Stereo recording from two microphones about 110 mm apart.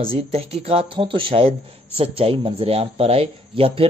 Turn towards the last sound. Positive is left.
turn(degrees=-60)  # may be behind; listen again after turning